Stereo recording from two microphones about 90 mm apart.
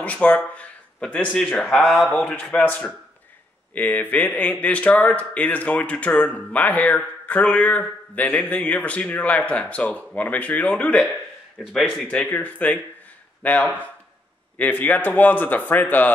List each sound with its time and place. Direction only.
0.0 s a man's voice: 15° left (ahead or behind)
12.2 s a man's voice: 15° left (ahead or behind)